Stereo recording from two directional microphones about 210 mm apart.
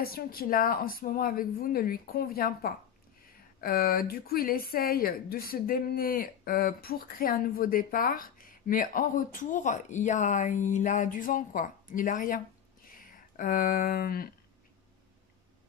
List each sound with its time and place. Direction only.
0.0 s a woman's voice: 45° left (ahead or behind)